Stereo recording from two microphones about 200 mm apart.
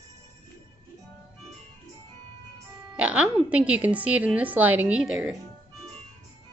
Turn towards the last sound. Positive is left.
turn(degrees=-5)  # may be behind; listen again after turning